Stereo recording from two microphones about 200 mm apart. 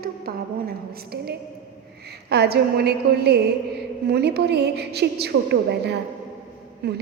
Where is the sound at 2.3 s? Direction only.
55° right (ahead or behind).